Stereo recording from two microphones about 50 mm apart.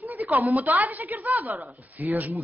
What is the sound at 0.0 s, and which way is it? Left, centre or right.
A woman's voice, right.